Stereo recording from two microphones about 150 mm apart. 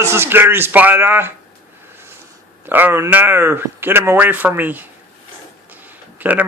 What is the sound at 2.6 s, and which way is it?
Speech, 15° right (ahead or behind).